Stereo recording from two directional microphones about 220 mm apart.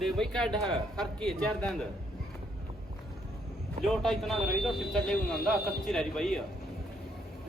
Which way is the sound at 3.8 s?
Centre (ahead or behind).